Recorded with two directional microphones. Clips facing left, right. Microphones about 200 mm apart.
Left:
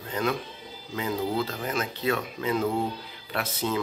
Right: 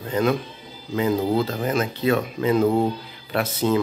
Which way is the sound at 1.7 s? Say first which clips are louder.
Right 7 dB; 20° right (ahead or behind).